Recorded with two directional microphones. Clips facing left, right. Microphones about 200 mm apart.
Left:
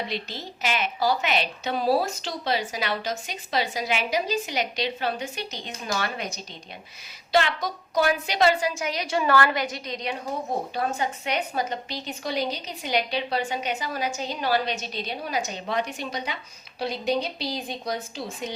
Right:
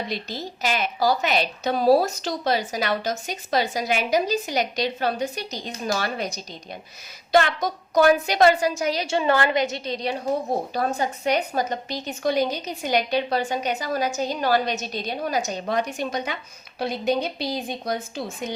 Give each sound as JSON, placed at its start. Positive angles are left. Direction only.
{"t": 0.1, "sound": "a woman's voice", "side_deg": -40}
{"t": 7.3, "sound": "a woman's voice", "side_deg": -50}